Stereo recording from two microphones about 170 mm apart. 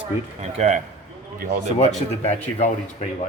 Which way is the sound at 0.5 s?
40° right (ahead or behind).